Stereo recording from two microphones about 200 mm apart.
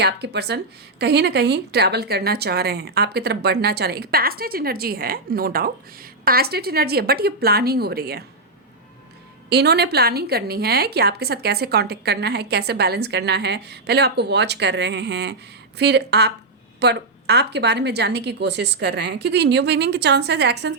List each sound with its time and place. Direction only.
0.0 s speech: 55° right (ahead or behind)
9.5 s a woman's voice: 55° right (ahead or behind)